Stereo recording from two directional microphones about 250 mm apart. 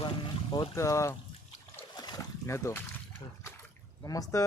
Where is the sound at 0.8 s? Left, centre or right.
Centre.